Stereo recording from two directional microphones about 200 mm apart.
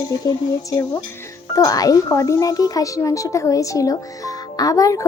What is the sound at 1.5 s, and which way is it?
A child's voice, 15° left (ahead or behind).